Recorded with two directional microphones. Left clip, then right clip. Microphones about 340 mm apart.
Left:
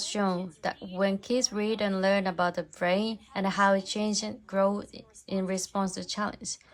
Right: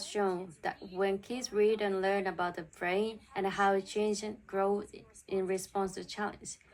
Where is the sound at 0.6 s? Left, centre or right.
Centre.